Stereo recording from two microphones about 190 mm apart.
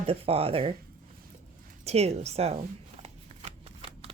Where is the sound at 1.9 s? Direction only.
35° right (ahead or behind).